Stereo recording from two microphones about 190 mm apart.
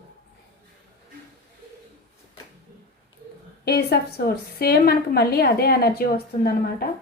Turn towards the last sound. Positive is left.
turn(degrees=55)  # may be behind; listen again after turning